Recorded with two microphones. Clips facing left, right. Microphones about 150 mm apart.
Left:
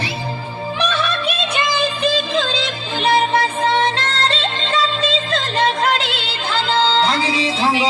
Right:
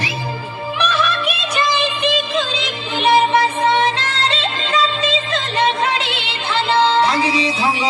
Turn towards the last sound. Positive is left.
turn(degrees=30)  # may be behind; listen again after turning